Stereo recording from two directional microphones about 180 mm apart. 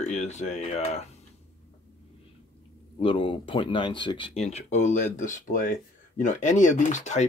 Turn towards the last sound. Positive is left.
turn(degrees=40)  # may be behind; listen again after turning